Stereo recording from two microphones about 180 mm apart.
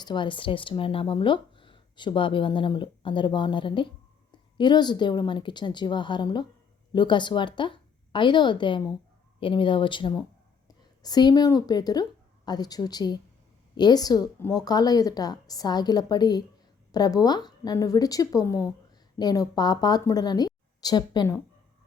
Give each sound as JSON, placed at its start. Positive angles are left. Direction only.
{"t": 0.0, "sound": "a woman's voice", "side_deg": 25}